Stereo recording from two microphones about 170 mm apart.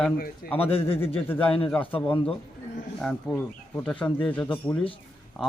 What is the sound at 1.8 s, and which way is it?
Speech, 30° left (ahead or behind).